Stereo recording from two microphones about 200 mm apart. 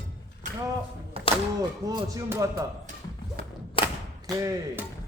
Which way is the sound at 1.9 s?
15° right (ahead or behind).